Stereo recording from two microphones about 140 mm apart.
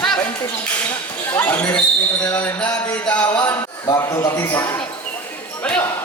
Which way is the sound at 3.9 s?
20° left (ahead or behind).